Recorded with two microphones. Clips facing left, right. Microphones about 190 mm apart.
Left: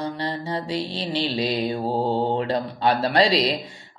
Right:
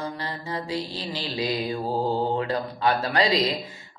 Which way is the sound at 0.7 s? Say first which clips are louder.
Left 3 dB; 75° left (ahead or behind).